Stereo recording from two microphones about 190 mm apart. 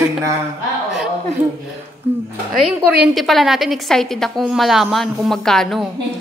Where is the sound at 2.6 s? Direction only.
5° right (ahead or behind).